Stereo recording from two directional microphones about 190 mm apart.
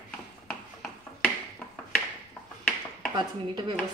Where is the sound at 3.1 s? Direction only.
25° right (ahead or behind).